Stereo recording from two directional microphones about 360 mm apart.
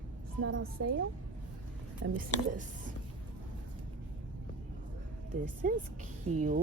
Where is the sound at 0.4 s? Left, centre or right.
Right.